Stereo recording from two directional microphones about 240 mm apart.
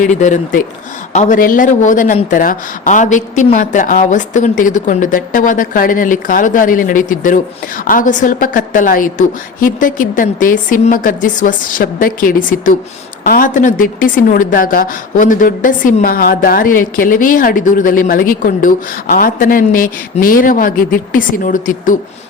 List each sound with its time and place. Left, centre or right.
0.0 s a woman's voice: left